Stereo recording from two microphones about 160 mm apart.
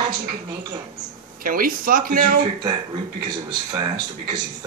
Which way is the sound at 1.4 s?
60° right (ahead or behind).